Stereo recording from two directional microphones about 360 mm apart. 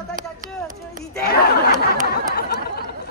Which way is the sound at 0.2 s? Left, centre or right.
Right.